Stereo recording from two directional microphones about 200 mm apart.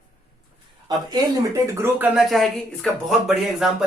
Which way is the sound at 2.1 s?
Centre (ahead or behind).